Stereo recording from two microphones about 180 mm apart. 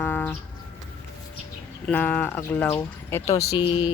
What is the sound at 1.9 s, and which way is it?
Speech, 10° left (ahead or behind).